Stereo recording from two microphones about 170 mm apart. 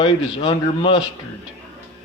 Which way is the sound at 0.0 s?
30° left (ahead or behind).